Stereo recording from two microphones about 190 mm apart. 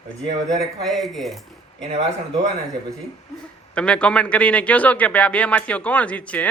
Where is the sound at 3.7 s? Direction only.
5° left (ahead or behind).